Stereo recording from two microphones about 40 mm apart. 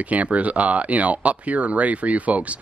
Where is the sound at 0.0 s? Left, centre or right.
Right.